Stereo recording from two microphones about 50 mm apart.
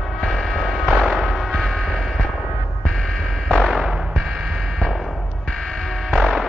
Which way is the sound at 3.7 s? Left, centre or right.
Centre.